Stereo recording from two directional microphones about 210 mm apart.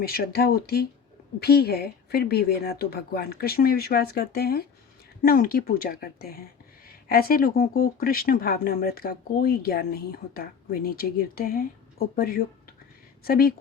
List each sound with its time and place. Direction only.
0.0 s speech: 45° left (ahead or behind)